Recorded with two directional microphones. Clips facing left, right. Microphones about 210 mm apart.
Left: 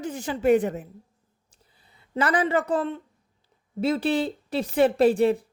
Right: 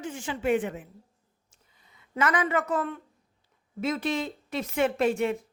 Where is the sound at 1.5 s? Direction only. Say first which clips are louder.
Left 2 dB; 35° left (ahead or behind).